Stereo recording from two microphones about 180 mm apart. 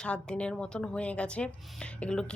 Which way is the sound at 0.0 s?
5° left (ahead or behind).